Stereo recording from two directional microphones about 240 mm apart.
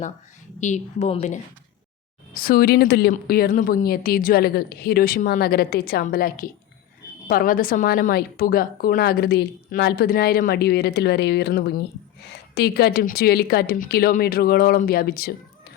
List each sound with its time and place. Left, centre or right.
0.6 s a woman's voice: left